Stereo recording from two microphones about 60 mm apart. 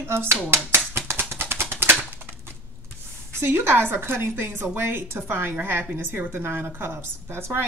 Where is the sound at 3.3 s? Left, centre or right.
Right.